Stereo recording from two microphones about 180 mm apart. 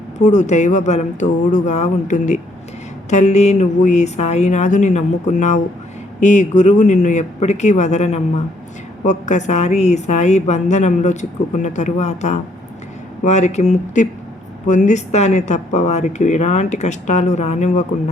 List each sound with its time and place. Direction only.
0.2 s a woman's voice: 40° left (ahead or behind)